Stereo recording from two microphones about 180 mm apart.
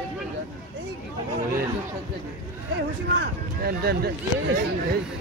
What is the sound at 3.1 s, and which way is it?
Speech, 60° right (ahead or behind).